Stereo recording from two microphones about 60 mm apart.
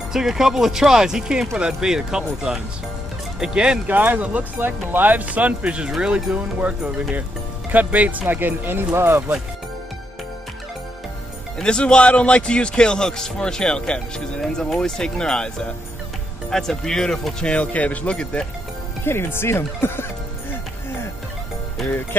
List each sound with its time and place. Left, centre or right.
0.1 s speech: centre
3.8 s speech: right
11.6 s a man's voice: centre
17.6 s speech: left
19.0 s speech: left